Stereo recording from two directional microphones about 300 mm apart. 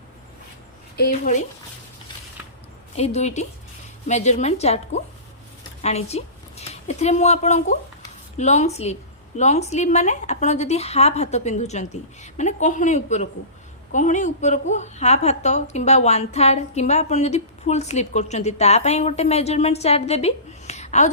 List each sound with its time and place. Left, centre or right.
0.9 s a woman's voice: left
2.9 s a woman's voice: left